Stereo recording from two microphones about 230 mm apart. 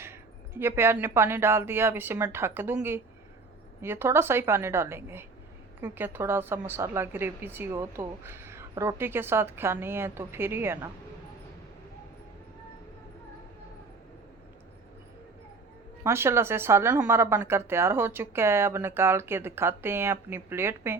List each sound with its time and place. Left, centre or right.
0.0 s a woman's voice: centre
16.0 s a woman's voice: centre